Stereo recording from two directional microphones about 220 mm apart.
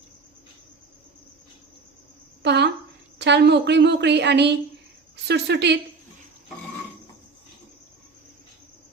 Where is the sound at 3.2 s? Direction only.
50° right (ahead or behind).